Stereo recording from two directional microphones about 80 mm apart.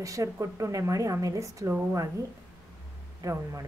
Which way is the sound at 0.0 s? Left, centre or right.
Right.